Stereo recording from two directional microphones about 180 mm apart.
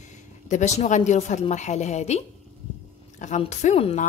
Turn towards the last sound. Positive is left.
turn(degrees=35)  # may be behind; listen again after turning